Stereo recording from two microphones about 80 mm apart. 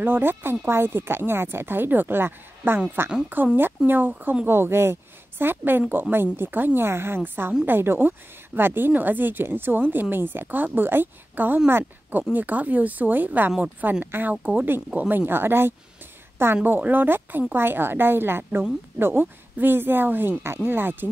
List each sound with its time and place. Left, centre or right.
0.0 s a woman's voice: right